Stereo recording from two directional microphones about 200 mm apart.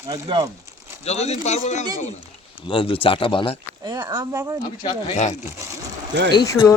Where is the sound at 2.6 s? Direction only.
25° left (ahead or behind).